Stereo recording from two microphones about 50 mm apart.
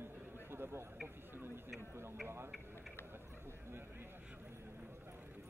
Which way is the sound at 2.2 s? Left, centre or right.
Right.